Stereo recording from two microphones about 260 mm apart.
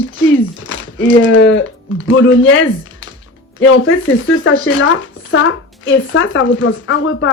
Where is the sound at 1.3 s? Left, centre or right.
Left.